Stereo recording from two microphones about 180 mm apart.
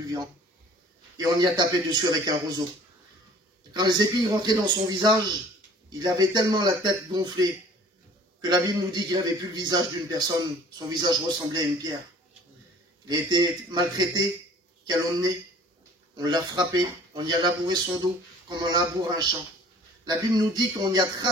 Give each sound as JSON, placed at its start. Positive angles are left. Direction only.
{"t": 0.0, "sound": "speech", "side_deg": -20}
{"t": 3.7, "sound": "speech", "side_deg": -20}
{"t": 13.1, "sound": "speech", "side_deg": -25}
{"t": 16.2, "sound": "speech", "side_deg": -20}